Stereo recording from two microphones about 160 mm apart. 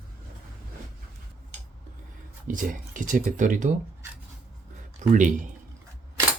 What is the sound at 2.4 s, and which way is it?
Speech, 55° right (ahead or behind).